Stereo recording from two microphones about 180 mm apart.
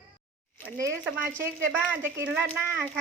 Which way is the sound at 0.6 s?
15° right (ahead or behind).